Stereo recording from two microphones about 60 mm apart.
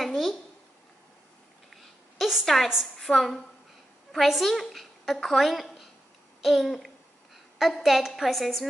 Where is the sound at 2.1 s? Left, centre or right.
Centre.